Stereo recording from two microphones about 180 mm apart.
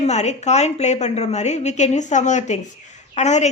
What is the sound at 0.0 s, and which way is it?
A woman's voice, 40° left (ahead or behind).